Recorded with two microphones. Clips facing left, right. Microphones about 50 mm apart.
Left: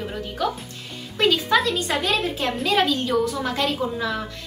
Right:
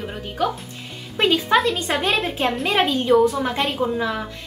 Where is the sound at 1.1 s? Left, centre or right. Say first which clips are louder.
Right 2 dB; right.